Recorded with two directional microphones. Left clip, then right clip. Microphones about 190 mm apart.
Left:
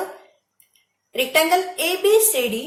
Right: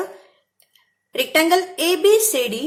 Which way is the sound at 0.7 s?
55° right (ahead or behind).